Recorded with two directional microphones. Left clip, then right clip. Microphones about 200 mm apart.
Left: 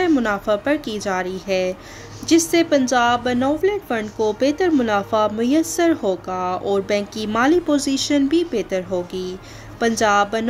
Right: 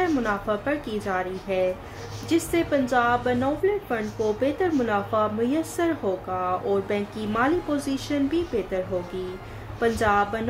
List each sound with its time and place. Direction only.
0.0 s speech: 50° left (ahead or behind)
2.9 s speech: 50° left (ahead or behind)